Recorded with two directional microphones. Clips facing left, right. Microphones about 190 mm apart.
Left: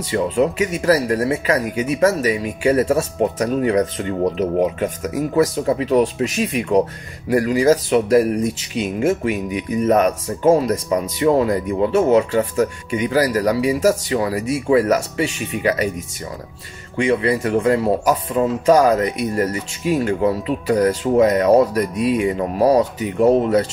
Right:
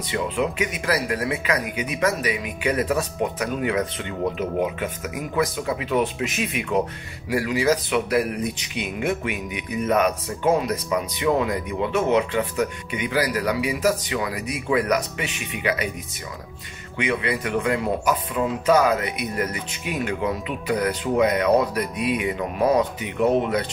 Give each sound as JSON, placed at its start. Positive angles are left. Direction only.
{"t": 0.1, "sound": "speech", "side_deg": 40}
{"t": 16.9, "sound": "speech", "side_deg": 40}